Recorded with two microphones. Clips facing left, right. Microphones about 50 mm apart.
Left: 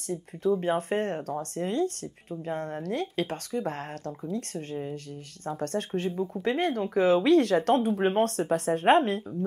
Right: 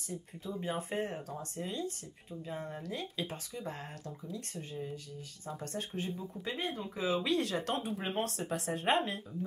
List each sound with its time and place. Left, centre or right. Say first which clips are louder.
0.1 s speech: left 14 dB; left